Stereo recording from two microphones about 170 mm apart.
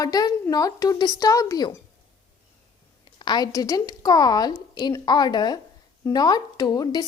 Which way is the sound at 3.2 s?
25° left (ahead or behind).